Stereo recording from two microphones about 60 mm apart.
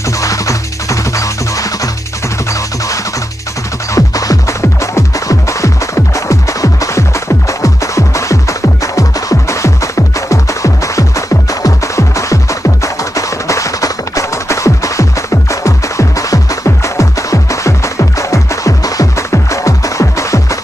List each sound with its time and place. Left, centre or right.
0.2 s music: left
3.9 s music: left
19.3 s music: left